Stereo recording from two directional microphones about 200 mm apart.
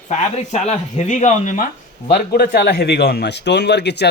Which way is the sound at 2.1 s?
50° left (ahead or behind).